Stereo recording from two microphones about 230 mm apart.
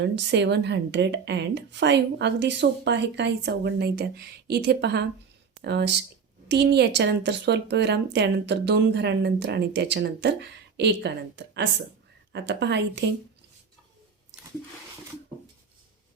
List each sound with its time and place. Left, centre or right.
0.0 s speech: right